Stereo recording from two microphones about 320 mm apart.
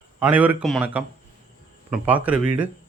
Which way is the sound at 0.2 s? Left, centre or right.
Centre.